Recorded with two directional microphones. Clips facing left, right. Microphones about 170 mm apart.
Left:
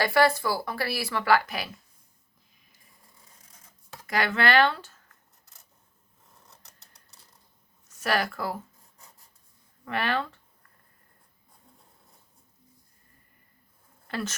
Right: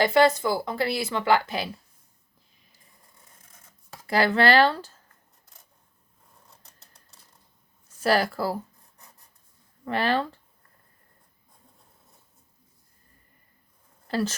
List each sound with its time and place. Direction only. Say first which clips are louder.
0.0 s speech: right 3 dB; 20° right (ahead or behind)
4.0 s speech: right 5 dB; 30° right (ahead or behind)
6.7 s typewriter: right 2 dB; centre (ahead or behind)
7.9 s speech: right 5 dB; 30° right (ahead or behind)
9.8 s speech: right 4 dB; 30° right (ahead or behind)
14.1 s speech: right 6 dB; 30° right (ahead or behind)